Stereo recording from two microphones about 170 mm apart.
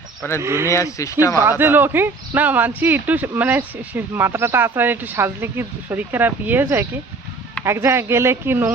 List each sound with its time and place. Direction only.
0.2 s speech: 15° left (ahead or behind)
0.4 s speech: 15° right (ahead or behind)
0.7 s speech: 20° left (ahead or behind)
1.4 s speech: 15° right (ahead or behind)